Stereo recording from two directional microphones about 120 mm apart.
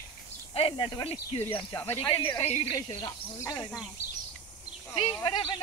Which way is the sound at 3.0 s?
30° left (ahead or behind).